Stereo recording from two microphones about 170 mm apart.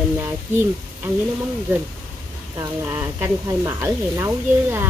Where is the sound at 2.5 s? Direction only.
15° right (ahead or behind).